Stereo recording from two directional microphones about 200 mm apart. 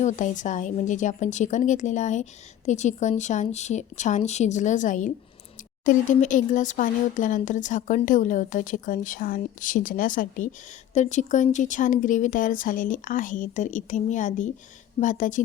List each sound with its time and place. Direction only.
0.0 s speech: 40° left (ahead or behind)